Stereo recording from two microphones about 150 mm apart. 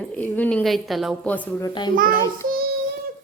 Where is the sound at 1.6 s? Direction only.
30° left (ahead or behind).